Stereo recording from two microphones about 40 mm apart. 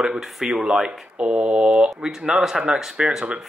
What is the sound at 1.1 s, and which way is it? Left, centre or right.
Speech, right.